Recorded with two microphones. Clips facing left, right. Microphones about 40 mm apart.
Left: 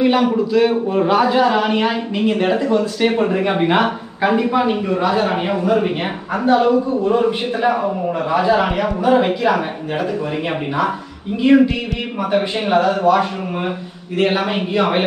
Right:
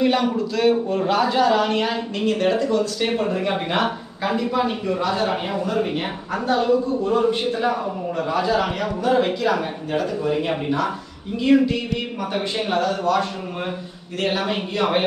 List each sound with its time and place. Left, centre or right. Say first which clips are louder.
0.0 s a man's voice: left 4 dB; centre
11.4 s a woman's voice: left 4 dB; left